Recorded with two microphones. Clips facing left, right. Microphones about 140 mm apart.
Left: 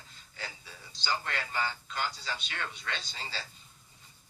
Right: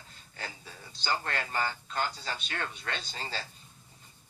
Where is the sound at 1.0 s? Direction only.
45° right (ahead or behind).